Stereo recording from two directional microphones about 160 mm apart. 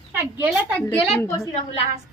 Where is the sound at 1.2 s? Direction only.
20° left (ahead or behind).